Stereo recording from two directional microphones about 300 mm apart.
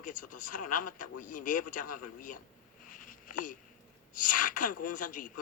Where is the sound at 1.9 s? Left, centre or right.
Left.